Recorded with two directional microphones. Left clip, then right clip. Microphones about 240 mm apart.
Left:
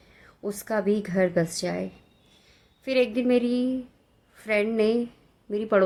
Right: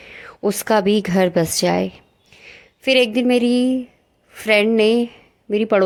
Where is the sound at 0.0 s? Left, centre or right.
Right.